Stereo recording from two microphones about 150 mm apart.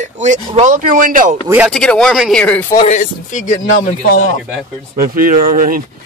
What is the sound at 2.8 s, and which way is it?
Speech, 55° left (ahead or behind).